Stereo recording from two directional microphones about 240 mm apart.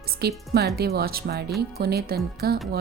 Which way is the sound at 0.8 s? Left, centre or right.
Right.